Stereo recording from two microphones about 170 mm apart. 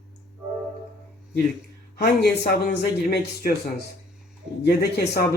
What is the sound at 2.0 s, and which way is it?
A man's voice, 70° left (ahead or behind).